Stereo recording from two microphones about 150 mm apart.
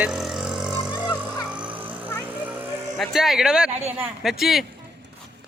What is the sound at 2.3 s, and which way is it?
Music, 10° right (ahead or behind).